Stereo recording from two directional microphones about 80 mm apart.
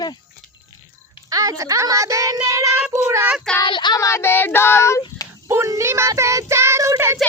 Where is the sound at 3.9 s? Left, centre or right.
Left.